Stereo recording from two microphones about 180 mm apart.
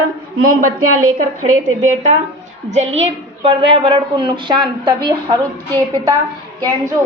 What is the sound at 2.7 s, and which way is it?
A woman's voice, 35° right (ahead or behind).